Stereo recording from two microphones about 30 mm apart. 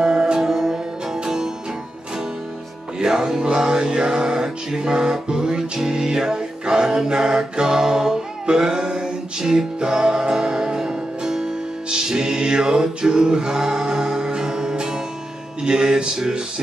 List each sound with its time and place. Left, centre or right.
0.0 s music: right
0.5 s music: centre
3.0 s music: right
9.4 s music: centre
9.8 s music: right